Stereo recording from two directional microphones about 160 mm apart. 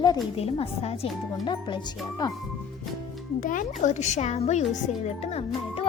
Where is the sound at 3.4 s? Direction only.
55° left (ahead or behind).